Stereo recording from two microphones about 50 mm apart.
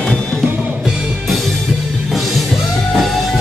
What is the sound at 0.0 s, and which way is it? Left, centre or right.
Music, centre.